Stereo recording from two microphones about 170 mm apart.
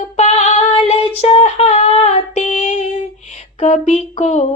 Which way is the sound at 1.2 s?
35° left (ahead or behind).